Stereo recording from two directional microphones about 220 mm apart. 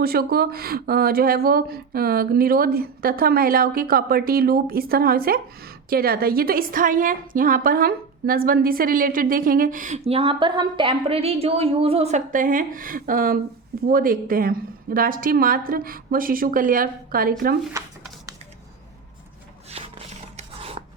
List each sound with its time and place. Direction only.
0.0 s a woman's voice: 45° right (ahead or behind)
19.7 s rub: 25° right (ahead or behind)